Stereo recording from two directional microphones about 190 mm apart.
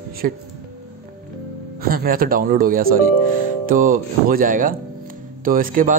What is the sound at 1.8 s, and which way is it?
A man's voice, 50° right (ahead or behind).